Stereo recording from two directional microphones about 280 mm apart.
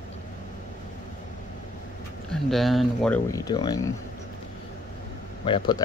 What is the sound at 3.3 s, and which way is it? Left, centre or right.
Speech, centre.